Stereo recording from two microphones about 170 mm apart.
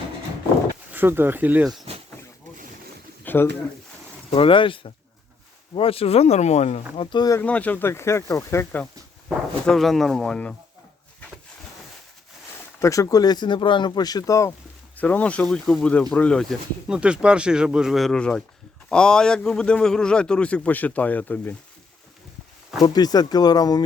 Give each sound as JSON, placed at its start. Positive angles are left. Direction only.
{"t": 0.9, "sound": "speech", "side_deg": -10}
{"t": 3.2, "sound": "speech", "side_deg": 15}
{"t": 4.4, "sound": "speech", "side_deg": 30}
{"t": 6.9, "sound": "speech", "side_deg": 30}
{"t": 7.4, "sound": "speech", "side_deg": 10}
{"t": 9.6, "sound": "speech", "side_deg": 0}
{"t": 12.8, "sound": "speech", "side_deg": 20}
{"t": 22.8, "sound": "speech", "side_deg": 20}